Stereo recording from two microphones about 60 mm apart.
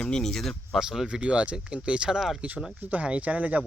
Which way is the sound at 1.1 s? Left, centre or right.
Centre.